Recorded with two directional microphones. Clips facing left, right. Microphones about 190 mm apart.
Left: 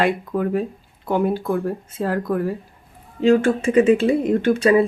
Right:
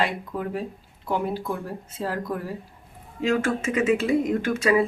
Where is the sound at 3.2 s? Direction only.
35° left (ahead or behind).